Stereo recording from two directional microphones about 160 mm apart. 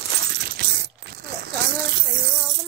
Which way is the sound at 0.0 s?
90° right.